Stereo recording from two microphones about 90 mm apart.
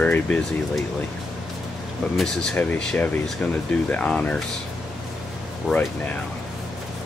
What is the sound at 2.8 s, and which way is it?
Speech, 10° left (ahead or behind).